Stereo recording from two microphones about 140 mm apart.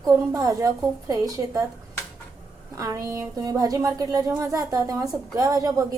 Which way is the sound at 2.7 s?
25° right (ahead or behind).